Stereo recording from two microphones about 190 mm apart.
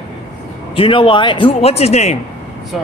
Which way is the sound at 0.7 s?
25° left (ahead or behind).